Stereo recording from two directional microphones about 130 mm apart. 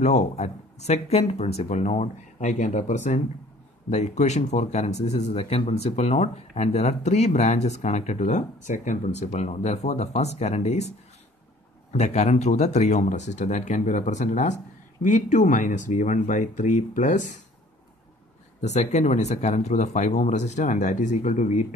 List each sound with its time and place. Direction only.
0.0 s speech: 55° left (ahead or behind); by 17.3 s 80° left
18.6 s speech: 60° left (ahead or behind)